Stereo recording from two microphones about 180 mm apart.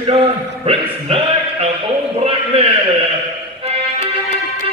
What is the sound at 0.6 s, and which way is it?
Speech, 35° right (ahead or behind).